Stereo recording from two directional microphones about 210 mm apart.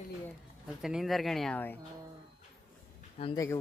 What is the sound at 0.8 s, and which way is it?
Speech, centre (ahead or behind).